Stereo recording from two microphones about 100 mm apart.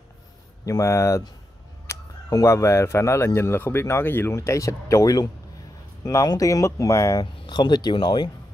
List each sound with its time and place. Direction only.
0.7 s speech: 30° left (ahead or behind)
7.4 s speech: 50° left (ahead or behind)